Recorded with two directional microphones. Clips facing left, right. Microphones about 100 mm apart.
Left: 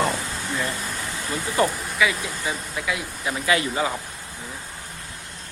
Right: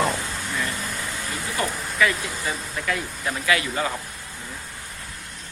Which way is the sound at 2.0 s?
5° left (ahead or behind).